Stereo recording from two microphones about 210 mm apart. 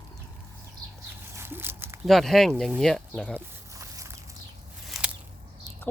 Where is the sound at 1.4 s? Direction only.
10° right (ahead or behind).